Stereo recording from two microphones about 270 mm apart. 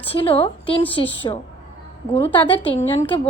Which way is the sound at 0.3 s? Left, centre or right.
Centre.